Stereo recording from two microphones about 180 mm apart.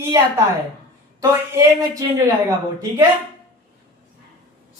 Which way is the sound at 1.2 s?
20° right (ahead or behind).